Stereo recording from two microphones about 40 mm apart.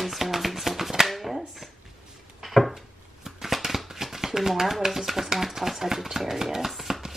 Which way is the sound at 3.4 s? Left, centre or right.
Centre.